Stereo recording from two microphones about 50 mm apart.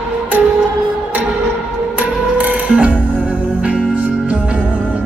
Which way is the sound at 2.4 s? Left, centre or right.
Right.